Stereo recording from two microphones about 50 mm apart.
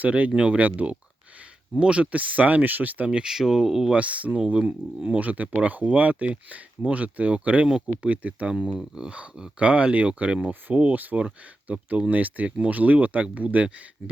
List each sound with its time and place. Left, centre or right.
0.0 s speech: right
3.1 s speech: centre
3.3 s speech: centre
3.9 s speech: right
4.4 s speech: centre
5.0 s speech: right
10.8 s speech: right